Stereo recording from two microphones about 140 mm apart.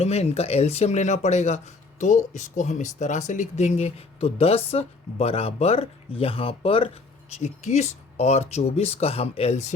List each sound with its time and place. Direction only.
0.0 s speech: 50° left (ahead or behind)